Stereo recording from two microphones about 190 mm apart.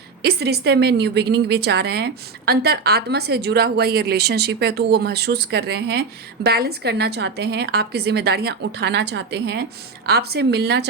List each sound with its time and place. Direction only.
0.2 s a woman's voice: 60° right (ahead or behind)